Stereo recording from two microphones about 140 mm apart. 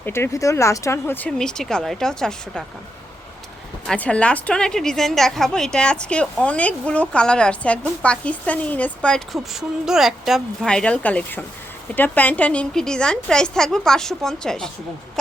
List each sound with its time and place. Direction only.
0.0 s speech: 15° left (ahead or behind)
1.3 s a woman's voice: 5° left (ahead or behind)
3.8 s a woman's voice: 10° left (ahead or behind)